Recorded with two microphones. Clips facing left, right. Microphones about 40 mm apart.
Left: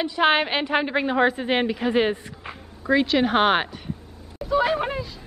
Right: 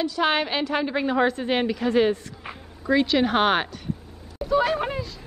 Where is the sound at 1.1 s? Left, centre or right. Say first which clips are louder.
Left 2 dB; centre.